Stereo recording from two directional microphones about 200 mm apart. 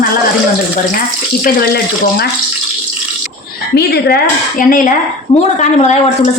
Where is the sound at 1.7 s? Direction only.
55° left (ahead or behind).